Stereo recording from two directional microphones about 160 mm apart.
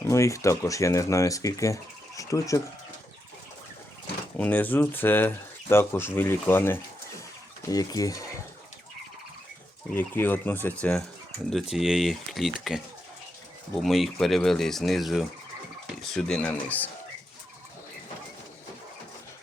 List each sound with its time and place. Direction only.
0.0 s speech: 20° left (ahead or behind)
4.4 s speech: 10° left (ahead or behind)
9.9 s speech: 10° left (ahead or behind)